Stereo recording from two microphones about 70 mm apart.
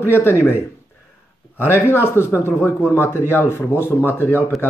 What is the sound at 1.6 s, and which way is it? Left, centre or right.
Speech, left.